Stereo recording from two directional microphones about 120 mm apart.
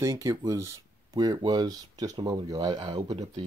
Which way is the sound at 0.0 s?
25° right (ahead or behind).